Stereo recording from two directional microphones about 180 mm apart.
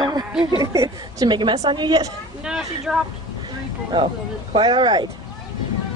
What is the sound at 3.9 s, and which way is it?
Speech, 30° right (ahead or behind).